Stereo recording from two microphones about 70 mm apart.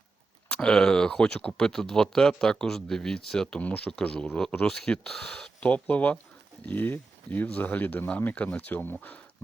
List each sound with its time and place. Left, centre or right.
0.4 s speech: centre
3.6 s speech: centre